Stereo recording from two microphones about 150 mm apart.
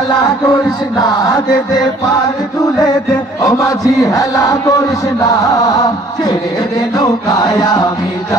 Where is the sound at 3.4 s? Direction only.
25° left (ahead or behind).